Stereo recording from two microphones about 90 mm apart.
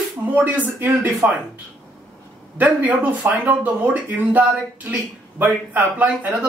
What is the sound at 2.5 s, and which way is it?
Speech, 20° right (ahead or behind).